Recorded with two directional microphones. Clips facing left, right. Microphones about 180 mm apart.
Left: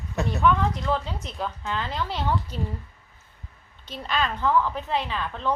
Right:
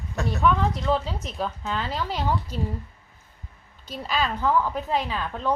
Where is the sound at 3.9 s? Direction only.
10° right (ahead or behind).